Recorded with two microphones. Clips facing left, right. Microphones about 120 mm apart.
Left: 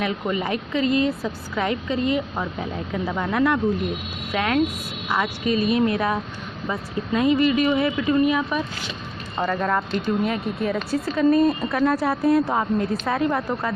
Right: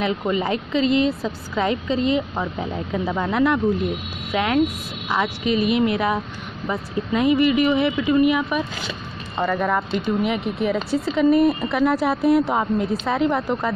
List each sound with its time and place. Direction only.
0.0 s a woman's voice: 25° right (ahead or behind)